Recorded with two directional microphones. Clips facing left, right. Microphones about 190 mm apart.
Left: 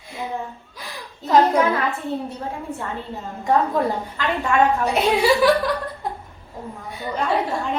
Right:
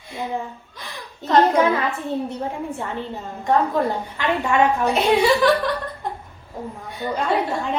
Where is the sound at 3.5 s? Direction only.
Centre (ahead or behind).